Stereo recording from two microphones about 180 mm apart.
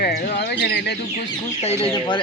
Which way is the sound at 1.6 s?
35° left (ahead or behind).